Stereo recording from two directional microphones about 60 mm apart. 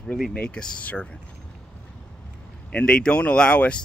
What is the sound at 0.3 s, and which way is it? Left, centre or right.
Speech, centre.